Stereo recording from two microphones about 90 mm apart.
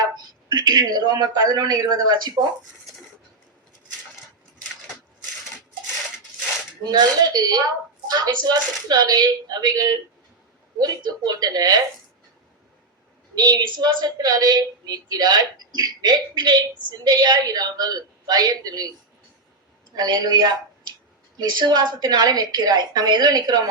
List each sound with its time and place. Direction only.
0.4 s a woman's voice: 50° right (ahead or behind)
6.8 s a woman's voice: 45° right (ahead or behind)
13.3 s a woman's voice: 50° right (ahead or behind)
20.0 s a woman's voice: 50° right (ahead or behind)